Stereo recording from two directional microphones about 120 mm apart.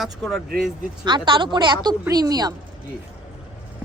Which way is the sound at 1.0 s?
40° right (ahead or behind).